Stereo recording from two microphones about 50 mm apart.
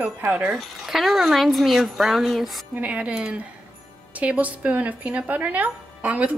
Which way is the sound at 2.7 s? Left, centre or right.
Right.